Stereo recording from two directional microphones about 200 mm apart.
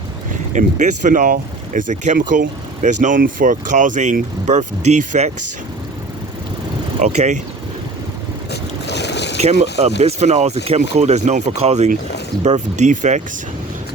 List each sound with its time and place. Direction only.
0.5 s speech: 40° right (ahead or behind)
7.0 s speech: 35° right (ahead or behind)
8.9 s boat: 60° left (ahead or behind)
9.4 s speech: 30° right (ahead or behind)